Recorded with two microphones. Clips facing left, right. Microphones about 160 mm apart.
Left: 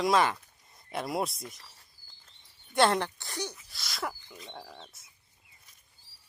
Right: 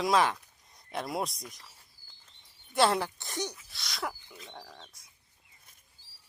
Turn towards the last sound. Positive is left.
turn(degrees=5)  # may be behind; listen again after turning